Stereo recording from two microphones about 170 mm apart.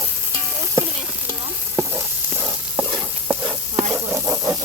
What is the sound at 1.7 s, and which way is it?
Stir, 15° right (ahead or behind).